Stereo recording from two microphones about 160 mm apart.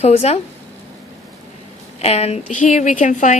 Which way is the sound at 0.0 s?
40° left (ahead or behind).